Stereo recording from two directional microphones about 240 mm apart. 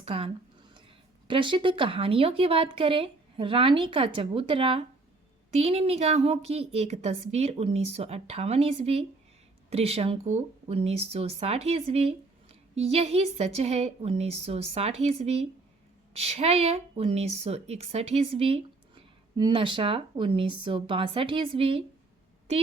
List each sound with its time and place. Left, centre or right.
0.0 s speech: right
1.3 s a woman's voice: right